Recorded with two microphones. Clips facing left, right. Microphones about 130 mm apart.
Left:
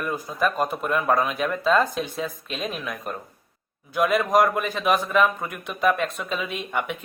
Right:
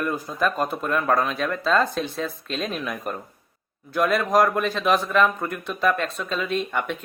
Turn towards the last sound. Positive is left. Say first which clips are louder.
# right 3 dB
turn(degrees=10)  # may be behind; listen again after turning